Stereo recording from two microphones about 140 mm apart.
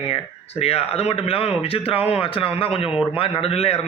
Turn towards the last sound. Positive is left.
turn(degrees=45)  # may be behind; listen again after turning